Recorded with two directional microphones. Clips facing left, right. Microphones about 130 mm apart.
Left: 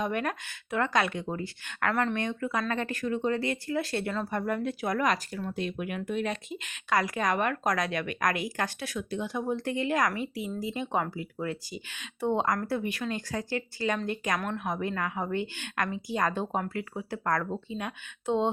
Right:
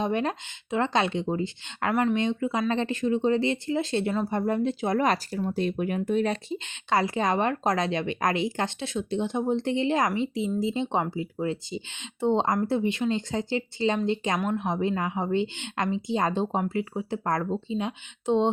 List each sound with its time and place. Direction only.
0.0 s speech: 25° right (ahead or behind)